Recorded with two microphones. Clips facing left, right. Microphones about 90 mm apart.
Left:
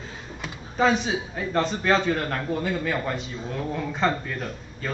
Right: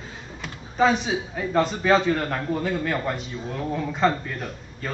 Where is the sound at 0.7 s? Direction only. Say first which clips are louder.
Right 1 dB; centre (ahead or behind).